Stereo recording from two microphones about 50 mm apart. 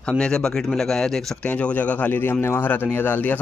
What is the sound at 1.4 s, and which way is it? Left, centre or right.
Speech, left.